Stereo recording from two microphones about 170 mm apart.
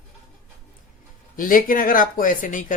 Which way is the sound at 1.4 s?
55° left (ahead or behind).